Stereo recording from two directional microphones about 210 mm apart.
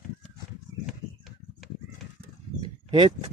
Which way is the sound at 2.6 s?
20° right (ahead or behind).